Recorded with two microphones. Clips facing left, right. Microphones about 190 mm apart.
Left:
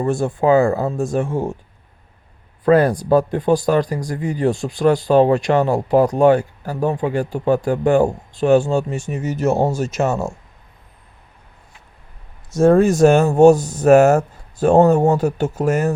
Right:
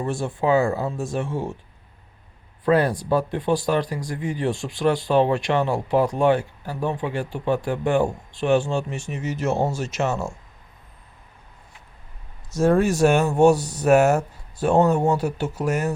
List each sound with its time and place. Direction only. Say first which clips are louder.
0.0 s speech: left 6 dB; 50° left (ahead or behind)
2.6 s speech: left 6 dB; 45° left (ahead or behind)
12.5 s speech: left 6 dB; 50° left (ahead or behind)